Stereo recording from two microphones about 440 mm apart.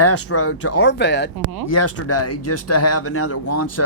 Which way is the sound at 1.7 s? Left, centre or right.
Left.